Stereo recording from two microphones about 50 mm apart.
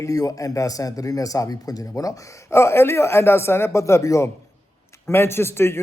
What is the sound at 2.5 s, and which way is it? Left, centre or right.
Speech, left.